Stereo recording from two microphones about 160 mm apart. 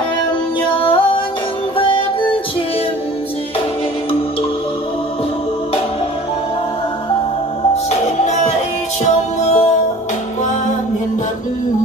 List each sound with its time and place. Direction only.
0.7 s music: 35° left (ahead or behind)
7.7 s music: 45° left (ahead or behind)